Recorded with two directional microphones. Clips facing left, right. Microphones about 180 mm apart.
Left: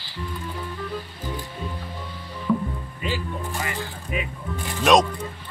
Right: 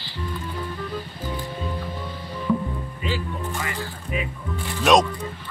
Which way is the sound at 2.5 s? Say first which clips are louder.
Even; 5° right (ahead or behind).